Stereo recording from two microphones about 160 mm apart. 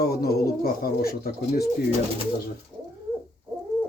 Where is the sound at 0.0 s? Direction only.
75° left (ahead or behind).